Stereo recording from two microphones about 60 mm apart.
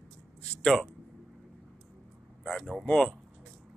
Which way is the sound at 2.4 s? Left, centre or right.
Centre.